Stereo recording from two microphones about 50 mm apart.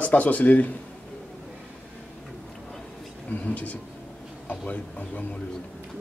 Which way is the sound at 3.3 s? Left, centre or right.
Left.